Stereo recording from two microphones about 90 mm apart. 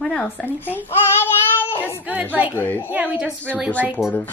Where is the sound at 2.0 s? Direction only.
15° right (ahead or behind).